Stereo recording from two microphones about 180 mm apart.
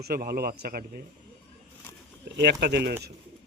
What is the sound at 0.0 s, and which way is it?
A man's voice, 55° right (ahead or behind).